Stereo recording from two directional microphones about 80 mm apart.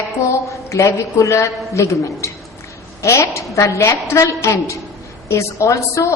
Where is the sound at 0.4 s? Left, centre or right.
Left.